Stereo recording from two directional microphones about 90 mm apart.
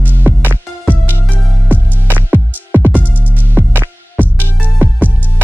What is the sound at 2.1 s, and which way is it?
Music, 20° right (ahead or behind).